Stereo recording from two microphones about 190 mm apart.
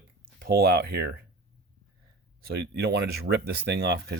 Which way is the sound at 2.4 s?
60° right (ahead or behind).